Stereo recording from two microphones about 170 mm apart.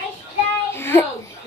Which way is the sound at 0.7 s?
15° left (ahead or behind).